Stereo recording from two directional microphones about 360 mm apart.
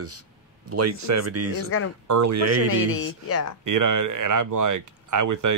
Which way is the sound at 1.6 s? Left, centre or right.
Left.